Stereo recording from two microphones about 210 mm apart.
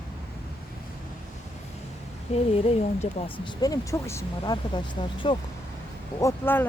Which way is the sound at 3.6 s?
15° left (ahead or behind).